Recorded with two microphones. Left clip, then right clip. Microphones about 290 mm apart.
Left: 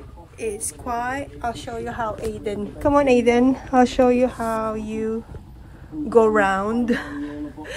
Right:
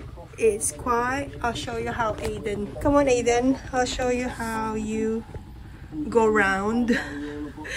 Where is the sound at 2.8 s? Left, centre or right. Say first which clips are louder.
Left 4 dB; left.